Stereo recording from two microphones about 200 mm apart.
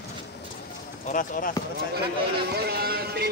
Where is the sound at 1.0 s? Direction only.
40° left (ahead or behind).